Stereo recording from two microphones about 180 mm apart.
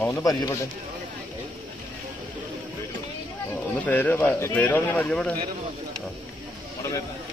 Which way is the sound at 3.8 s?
10° left (ahead or behind).